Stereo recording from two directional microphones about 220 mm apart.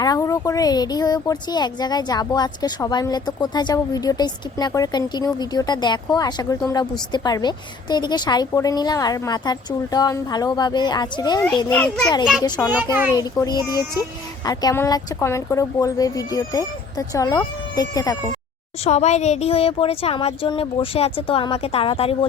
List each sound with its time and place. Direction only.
0.0 s speech: 15° left (ahead or behind)
11.5 s a child's voice: 5° left (ahead or behind)
12.4 s speech: 15° left (ahead or behind)
12.7 s a child's voice: 5° right (ahead or behind)
13.1 s speech: 15° left (ahead or behind)
18.9 s speech: 30° left (ahead or behind)